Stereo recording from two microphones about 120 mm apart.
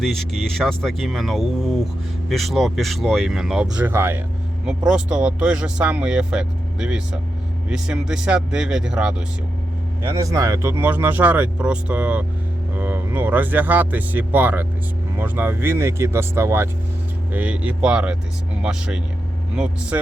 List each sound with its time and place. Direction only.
0.0 s speech: 5° left (ahead or behind); by 4.2 s 20° right (ahead or behind)
4.9 s speech: 5° right (ahead or behind)
10.0 s speech: 25° right (ahead or behind)